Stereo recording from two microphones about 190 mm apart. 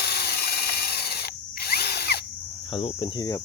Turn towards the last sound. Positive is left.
turn(degrees=20)  # may be behind; listen again after turning